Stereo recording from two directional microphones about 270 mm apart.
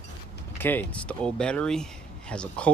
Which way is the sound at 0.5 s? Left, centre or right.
Centre.